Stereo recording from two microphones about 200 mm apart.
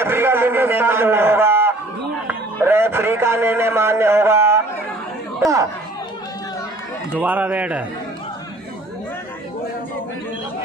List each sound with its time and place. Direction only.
0.0 s a sound: 10° right (ahead or behind)
2.2 s a man's voice: 10° right (ahead or behind)
7.2 s a man's voice: 10° right (ahead or behind)